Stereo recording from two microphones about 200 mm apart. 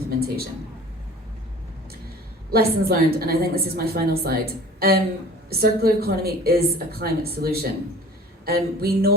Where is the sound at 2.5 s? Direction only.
50° right (ahead or behind).